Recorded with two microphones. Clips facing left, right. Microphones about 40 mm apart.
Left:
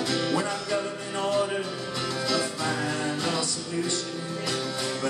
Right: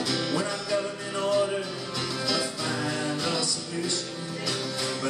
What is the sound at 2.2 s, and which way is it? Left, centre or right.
Music, centre.